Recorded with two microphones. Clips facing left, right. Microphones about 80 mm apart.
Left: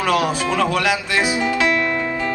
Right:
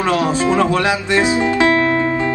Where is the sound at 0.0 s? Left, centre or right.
Right.